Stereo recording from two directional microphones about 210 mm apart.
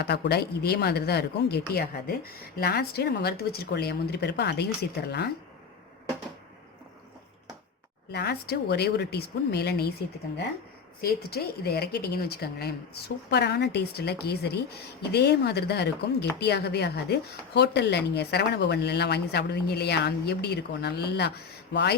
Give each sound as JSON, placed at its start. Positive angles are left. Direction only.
{"t": 0.0, "sound": "speech", "side_deg": 50}
{"t": 8.1, "sound": "speech", "side_deg": 50}
{"t": 11.0, "sound": "speech", "side_deg": 50}